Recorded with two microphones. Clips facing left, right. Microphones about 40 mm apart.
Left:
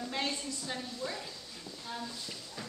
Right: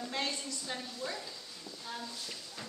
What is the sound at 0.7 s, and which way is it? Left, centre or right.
A woman's voice, centre.